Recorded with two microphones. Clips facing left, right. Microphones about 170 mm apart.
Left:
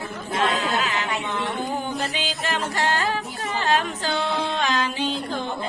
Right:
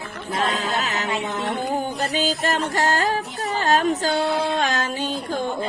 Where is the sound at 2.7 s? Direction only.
40° right (ahead or behind).